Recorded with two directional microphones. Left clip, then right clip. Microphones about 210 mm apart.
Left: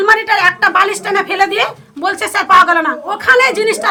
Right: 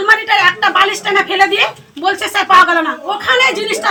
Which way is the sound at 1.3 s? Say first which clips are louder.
Right 2 dB; 10° left (ahead or behind).